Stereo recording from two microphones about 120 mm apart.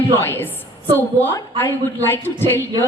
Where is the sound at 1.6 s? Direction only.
20° left (ahead or behind).